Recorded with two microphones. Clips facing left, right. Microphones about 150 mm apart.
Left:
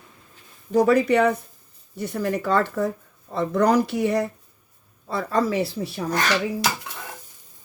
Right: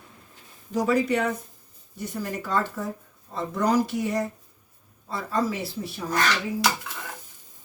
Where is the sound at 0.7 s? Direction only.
65° left (ahead or behind).